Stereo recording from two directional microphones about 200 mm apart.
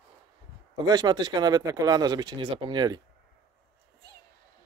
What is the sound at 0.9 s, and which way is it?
Speech, 20° right (ahead or behind).